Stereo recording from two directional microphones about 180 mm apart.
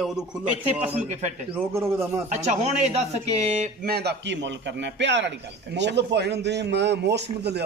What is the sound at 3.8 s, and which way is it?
A man's voice, 60° right (ahead or behind).